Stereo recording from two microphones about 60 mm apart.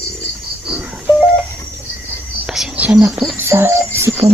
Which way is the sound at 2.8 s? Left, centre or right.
Right.